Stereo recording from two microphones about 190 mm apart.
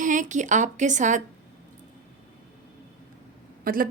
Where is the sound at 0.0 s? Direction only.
40° right (ahead or behind).